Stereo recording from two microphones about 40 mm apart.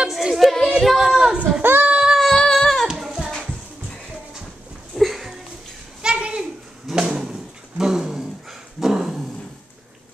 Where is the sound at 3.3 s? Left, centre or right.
Centre.